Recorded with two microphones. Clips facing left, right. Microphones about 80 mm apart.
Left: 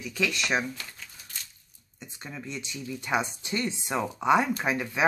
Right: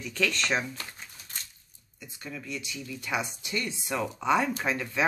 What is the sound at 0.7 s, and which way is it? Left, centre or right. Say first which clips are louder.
Crumpling: right 1 dB; right.